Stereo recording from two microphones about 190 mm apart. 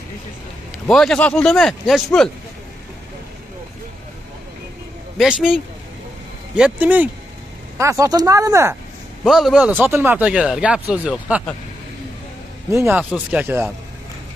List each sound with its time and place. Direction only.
0.8 s speech: 5° left (ahead or behind)
5.1 s speech: 5° right (ahead or behind)
9.2 s speech: centre (ahead or behind)
12.7 s speech: 10° right (ahead or behind)